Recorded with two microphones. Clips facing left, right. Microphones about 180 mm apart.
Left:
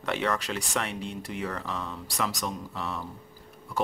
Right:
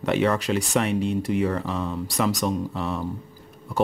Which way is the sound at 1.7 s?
25° right (ahead or behind).